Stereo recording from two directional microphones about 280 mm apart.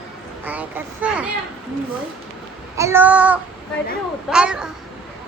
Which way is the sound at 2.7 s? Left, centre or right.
Centre.